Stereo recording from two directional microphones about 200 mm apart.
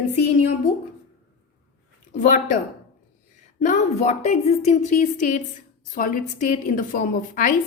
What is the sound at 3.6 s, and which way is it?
A woman's voice, 35° left (ahead or behind).